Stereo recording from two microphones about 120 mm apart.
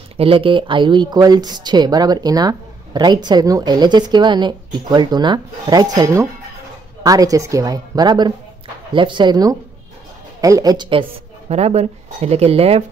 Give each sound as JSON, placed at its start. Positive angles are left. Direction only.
{"t": 0.2, "sound": "speech", "side_deg": -50}
{"t": 10.9, "sound": "a woman's voice", "side_deg": -50}